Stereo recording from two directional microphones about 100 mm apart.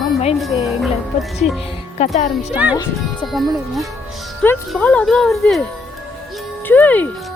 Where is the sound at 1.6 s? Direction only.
85° left.